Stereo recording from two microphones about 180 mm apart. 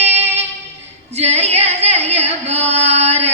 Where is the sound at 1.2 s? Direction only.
35° right (ahead or behind).